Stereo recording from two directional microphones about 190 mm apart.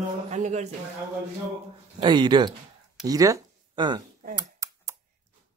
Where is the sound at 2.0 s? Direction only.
25° right (ahead or behind).